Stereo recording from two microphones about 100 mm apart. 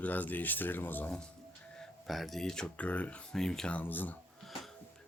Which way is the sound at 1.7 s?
Centre (ahead or behind).